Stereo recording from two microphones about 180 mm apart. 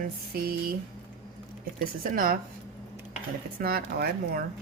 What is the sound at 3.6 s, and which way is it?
Speech, 55° right (ahead or behind).